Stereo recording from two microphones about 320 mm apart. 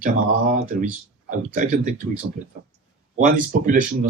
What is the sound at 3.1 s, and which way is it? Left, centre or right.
Speech, right.